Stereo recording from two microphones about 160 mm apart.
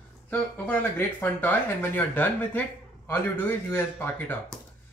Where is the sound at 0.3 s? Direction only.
10° left (ahead or behind).